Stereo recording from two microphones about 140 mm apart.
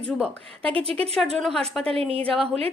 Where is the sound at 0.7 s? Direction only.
45° right (ahead or behind).